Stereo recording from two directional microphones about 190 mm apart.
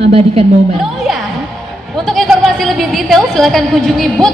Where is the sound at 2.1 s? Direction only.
Centre (ahead or behind).